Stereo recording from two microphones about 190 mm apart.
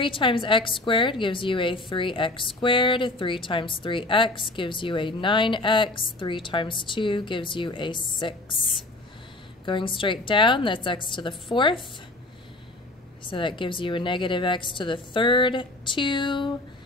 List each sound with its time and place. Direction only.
0.0 s a woman's voice: 25° left (ahead or behind)
9.7 s a woman's voice: 25° left (ahead or behind)
13.3 s a woman's voice: 25° left (ahead or behind)